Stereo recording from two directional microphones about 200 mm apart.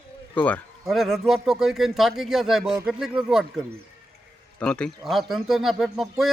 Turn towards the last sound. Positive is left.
turn(degrees=0)  # may be behind; listen again after turning